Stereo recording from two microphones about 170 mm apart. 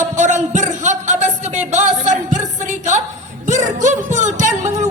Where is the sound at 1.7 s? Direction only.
45° right (ahead or behind).